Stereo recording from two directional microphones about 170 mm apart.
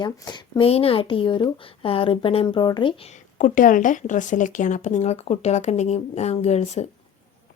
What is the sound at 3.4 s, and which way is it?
Speech, 50° left (ahead or behind).